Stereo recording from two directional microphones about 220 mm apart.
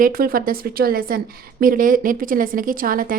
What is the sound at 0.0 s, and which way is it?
Speech, 40° right (ahead or behind).